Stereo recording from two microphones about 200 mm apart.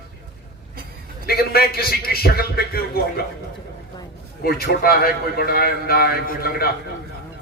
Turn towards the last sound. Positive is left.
turn(degrees=50)  # may be behind; listen again after turning